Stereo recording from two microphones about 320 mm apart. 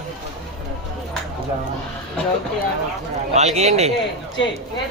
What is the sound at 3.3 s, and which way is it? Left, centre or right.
Speech, right.